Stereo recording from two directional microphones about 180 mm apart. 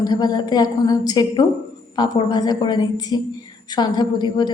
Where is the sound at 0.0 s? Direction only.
20° left (ahead or behind).